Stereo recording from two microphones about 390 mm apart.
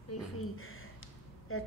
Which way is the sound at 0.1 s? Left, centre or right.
Left.